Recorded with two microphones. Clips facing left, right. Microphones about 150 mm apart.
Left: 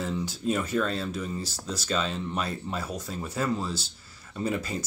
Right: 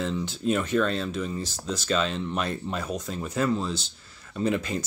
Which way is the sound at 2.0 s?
60° right (ahead or behind).